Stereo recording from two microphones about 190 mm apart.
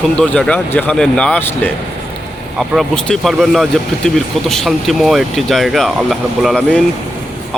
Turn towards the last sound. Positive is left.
turn(degrees=0)  # may be behind; listen again after turning